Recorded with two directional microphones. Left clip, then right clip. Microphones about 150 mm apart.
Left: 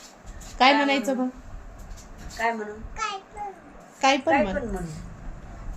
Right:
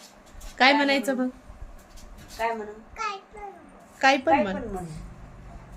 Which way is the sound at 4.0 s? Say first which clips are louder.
Even; 15° right (ahead or behind).